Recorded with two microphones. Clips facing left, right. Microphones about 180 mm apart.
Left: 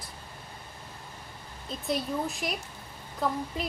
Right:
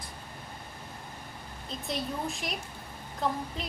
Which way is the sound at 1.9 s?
Centre (ahead or behind).